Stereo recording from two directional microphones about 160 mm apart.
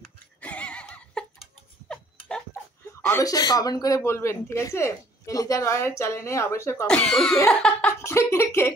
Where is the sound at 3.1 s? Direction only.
20° left (ahead or behind).